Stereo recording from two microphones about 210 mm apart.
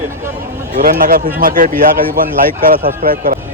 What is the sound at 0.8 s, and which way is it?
A man's voice, 40° right (ahead or behind).